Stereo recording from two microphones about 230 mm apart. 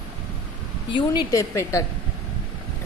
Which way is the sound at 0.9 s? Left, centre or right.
Centre.